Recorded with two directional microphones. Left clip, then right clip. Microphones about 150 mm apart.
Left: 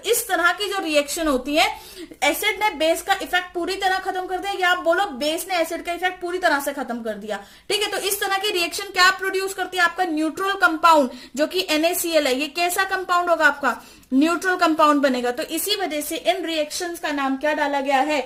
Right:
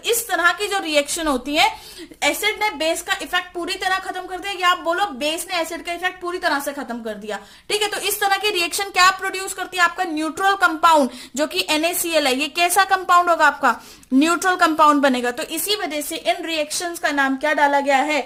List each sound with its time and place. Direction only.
0.0 s a woman's voice: 25° right (ahead or behind)
17.0 s a woman's voice: 50° right (ahead or behind)